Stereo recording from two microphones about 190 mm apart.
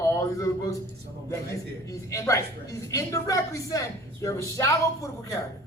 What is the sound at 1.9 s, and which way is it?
A woman's voice, 15° left (ahead or behind).